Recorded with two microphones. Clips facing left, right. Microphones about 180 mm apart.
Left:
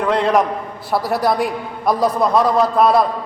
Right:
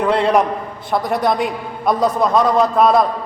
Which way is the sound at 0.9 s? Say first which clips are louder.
Even; 5° left (ahead or behind).